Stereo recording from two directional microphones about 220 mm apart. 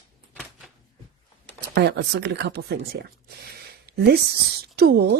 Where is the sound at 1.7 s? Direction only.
50° right (ahead or behind).